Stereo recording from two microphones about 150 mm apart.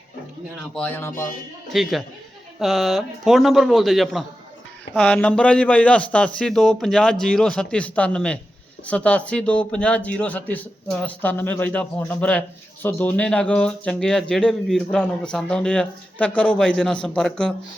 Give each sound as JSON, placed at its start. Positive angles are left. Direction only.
{"t": 0.7, "sound": "speech", "side_deg": 10}
{"t": 1.7, "sound": "a man's voice", "side_deg": 0}